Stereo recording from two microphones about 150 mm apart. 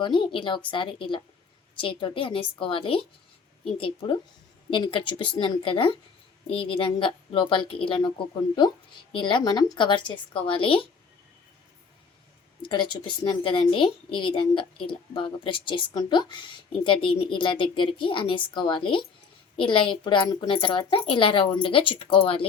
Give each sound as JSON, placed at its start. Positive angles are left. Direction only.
{"t": 0.0, "sound": "speech", "side_deg": 35}
{"t": 12.6, "sound": "speech", "side_deg": 30}